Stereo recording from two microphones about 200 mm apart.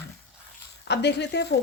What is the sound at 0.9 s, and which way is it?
Speech, 60° left (ahead or behind).